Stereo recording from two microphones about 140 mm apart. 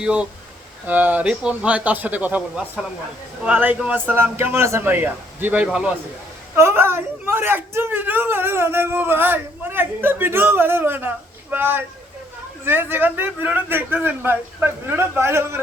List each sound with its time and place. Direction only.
0.0 s a man's voice: 5° right (ahead or behind)
6.6 s a man's voice: 20° right (ahead or behind)